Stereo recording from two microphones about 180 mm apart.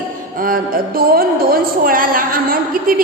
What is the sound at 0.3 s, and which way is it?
A woman's voice, 50° right (ahead or behind).